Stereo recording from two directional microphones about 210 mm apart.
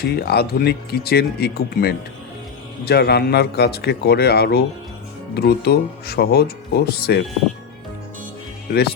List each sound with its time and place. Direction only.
0.0 s speech: 50° left (ahead or behind)